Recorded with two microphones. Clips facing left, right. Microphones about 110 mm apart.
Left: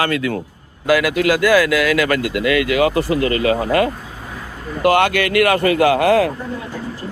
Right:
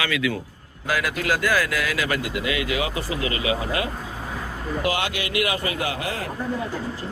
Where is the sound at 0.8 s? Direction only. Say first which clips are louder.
Left 10 dB; 90° left.